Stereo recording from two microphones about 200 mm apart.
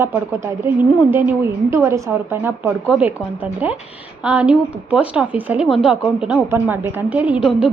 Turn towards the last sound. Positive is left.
turn(degrees=-5)  # may be behind; listen again after turning